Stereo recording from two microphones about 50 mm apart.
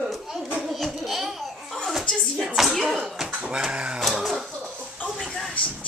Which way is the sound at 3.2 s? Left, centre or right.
Right.